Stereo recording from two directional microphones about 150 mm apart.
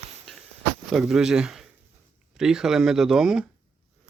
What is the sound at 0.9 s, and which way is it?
Speech, centre (ahead or behind).